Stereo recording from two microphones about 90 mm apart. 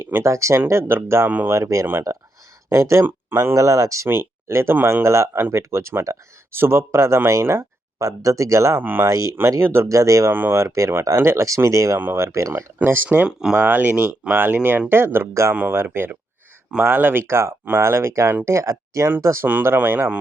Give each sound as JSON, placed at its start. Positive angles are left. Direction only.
{"t": 0.0, "sound": "speech", "side_deg": -30}
{"t": 8.8, "sound": "speech", "side_deg": -20}
{"t": 9.0, "sound": "speech", "side_deg": -35}
{"t": 9.9, "sound": "speech", "side_deg": -40}
{"t": 10.3, "sound": "speech", "side_deg": -25}
{"t": 13.1, "sound": "speech", "side_deg": -10}
{"t": 13.6, "sound": "speech", "side_deg": -20}